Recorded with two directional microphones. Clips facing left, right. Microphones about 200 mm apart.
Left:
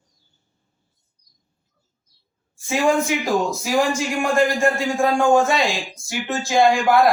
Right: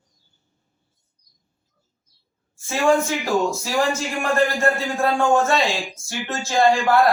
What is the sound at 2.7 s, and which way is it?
A man's voice, 15° left (ahead or behind).